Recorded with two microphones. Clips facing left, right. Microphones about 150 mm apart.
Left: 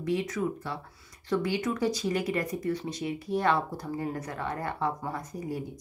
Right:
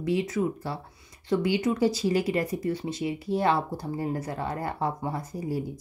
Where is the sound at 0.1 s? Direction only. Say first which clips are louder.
Right 3 dB; 30° right (ahead or behind).